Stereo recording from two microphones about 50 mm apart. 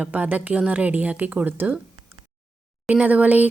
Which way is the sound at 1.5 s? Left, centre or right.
Right.